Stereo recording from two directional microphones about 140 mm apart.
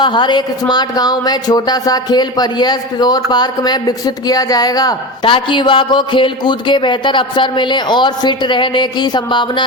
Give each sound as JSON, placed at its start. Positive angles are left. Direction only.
{"t": 0.0, "sound": "speech", "side_deg": 35}